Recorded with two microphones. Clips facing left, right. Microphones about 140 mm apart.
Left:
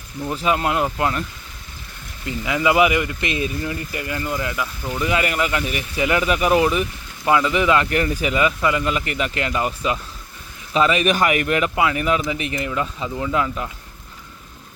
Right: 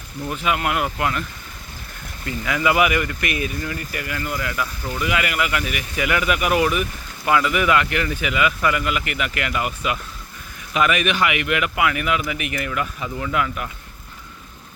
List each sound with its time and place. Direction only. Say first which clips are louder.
0.3 s speech: left 2 dB; 30° left (ahead or behind)
2.2 s speech: left 1 dB; 20° left (ahead or behind)
5.0 s speech: left 2 dB; 35° left (ahead or behind)
7.9 s speech: left 3 dB; 40° left (ahead or behind)